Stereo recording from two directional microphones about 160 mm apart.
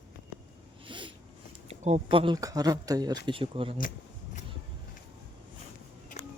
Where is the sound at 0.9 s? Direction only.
30° right (ahead or behind).